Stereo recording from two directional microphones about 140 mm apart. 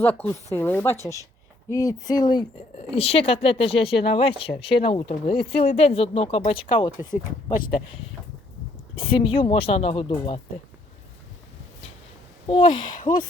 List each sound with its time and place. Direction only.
0.0 s speech: 10° left (ahead or behind); by 2.5 s 30° left (ahead or behind)
2.7 s speech: 45° left (ahead or behind)
9.0 s speech: 40° left (ahead or behind)
12.5 s speech: 40° left (ahead or behind)